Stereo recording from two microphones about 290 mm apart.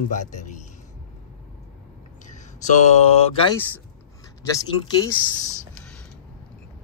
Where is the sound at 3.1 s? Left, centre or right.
Left.